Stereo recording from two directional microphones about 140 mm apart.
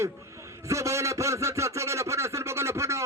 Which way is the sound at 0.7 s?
20° right (ahead or behind).